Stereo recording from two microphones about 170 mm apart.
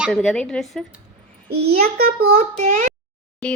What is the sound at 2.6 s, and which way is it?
Speech, 50° right (ahead or behind).